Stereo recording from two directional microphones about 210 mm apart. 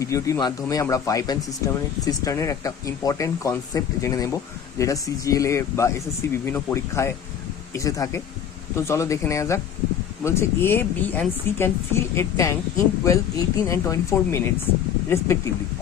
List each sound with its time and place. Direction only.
0.0 s speech: 15° left (ahead or behind)